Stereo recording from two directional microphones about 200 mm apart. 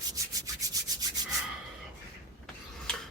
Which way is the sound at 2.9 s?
5° left (ahead or behind).